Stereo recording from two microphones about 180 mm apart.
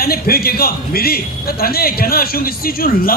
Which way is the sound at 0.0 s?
55° left (ahead or behind).